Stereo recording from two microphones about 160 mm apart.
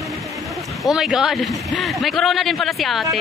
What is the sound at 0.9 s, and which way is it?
A man's voice, 5° right (ahead or behind).